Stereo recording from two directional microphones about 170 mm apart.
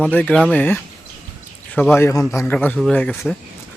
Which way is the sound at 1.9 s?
15° left (ahead or behind).